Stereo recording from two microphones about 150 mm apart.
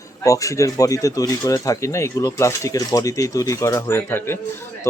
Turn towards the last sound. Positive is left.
turn(degrees=15)  # may be behind; listen again after turning